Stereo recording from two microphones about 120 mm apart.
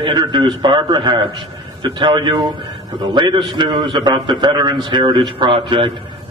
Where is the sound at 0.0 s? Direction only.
40° right (ahead or behind).